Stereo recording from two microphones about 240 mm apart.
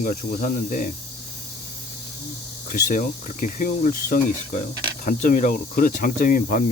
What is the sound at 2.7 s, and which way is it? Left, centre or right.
Speech, left.